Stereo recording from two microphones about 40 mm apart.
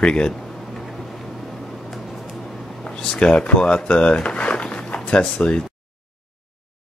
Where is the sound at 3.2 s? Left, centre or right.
Left.